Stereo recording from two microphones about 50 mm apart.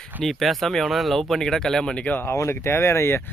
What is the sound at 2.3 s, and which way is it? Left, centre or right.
Speech, left.